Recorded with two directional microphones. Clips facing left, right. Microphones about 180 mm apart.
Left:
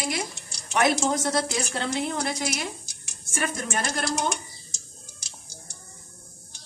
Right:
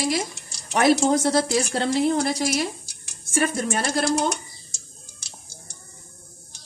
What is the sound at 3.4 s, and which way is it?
Speech, 35° right (ahead or behind).